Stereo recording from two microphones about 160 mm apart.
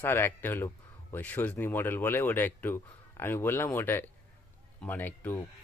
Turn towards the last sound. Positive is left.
turn(degrees=10)  # may be behind; listen again after turning